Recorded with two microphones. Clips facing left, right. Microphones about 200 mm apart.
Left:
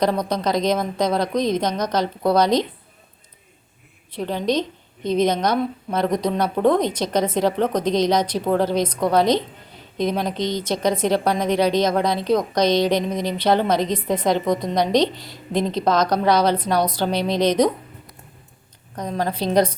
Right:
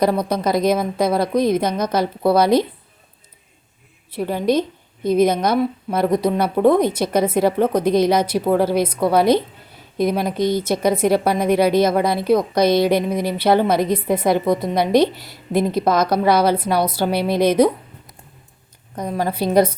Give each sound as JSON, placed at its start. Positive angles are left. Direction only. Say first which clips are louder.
{"t": 0.0, "sound": "a woman's voice", "louder": "right 2 dB", "side_deg": -10}
{"t": 4.1, "sound": "a woman's voice", "louder": "right 3 dB", "side_deg": -10}
{"t": 18.9, "sound": "a woman's voice", "louder": "right 2 dB", "side_deg": -10}